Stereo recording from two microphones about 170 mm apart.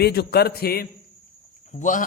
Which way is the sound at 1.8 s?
50° left (ahead or behind).